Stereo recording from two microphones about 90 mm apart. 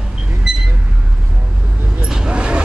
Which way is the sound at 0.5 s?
5° right (ahead or behind).